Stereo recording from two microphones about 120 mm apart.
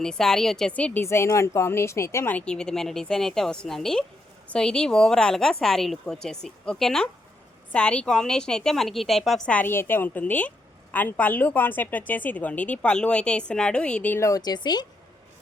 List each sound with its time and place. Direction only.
0.0 s a woman's voice: 5° left (ahead or behind)
1.0 s a woman's voice: 25° left (ahead or behind); by 9.4 s centre (ahead or behind)
9.5 s speech: 15° left (ahead or behind)
14.2 s a woman's voice: 30° left (ahead or behind)